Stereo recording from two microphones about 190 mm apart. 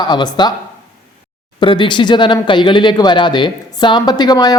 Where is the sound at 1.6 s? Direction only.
25° left (ahead or behind).